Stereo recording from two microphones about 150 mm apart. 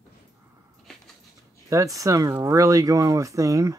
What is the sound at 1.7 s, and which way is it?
Speech, 20° right (ahead or behind).